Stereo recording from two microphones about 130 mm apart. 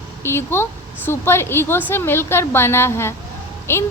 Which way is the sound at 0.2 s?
20° left (ahead or behind).